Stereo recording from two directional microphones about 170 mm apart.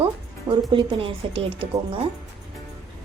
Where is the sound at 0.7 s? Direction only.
30° right (ahead or behind).